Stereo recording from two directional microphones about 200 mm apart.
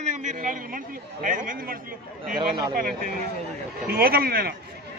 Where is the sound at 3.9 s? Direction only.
50° right (ahead or behind).